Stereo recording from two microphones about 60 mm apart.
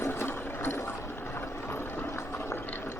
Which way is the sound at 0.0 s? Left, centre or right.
Left.